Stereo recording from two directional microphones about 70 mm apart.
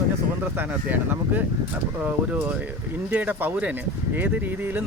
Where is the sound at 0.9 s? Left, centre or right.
Right.